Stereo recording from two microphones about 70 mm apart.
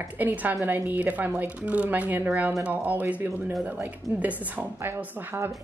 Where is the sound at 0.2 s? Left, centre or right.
Right.